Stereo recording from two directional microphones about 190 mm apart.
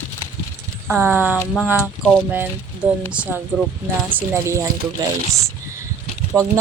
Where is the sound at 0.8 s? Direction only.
10° right (ahead or behind).